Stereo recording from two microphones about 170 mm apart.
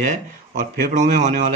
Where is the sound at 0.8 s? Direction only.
50° right (ahead or behind).